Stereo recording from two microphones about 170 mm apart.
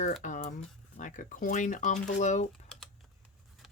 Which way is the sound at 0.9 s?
45° left (ahead or behind).